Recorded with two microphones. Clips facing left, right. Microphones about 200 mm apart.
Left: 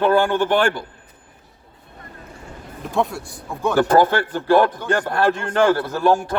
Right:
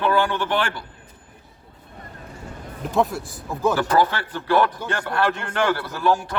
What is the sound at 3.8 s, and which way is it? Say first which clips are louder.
Speech: left 5 dB; 50° left (ahead or behind).